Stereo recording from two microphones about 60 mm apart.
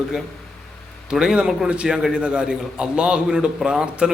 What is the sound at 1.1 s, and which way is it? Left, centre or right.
A man's voice, centre.